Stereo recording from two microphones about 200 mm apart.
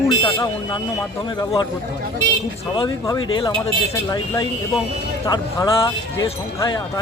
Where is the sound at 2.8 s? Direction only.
15° left (ahead or behind).